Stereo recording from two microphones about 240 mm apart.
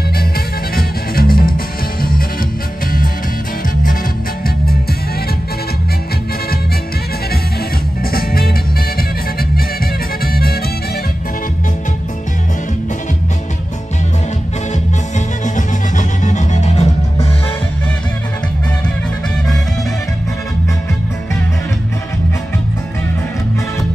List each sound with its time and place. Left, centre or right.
0.7 s music: left
8.0 s music: left
15.1 s music: left